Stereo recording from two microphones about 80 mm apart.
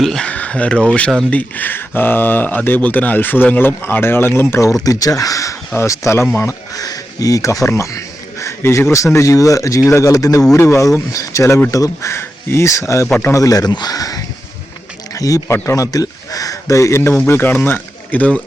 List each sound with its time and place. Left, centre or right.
0.0 s speech: centre
0.3 s a sound: centre
1.3 s speech: left
4.9 s speech: left
6.7 s speech: left
13.3 s speech: left; by 18.4 s centre